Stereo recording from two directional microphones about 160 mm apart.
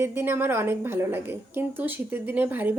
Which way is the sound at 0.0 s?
15° right (ahead or behind).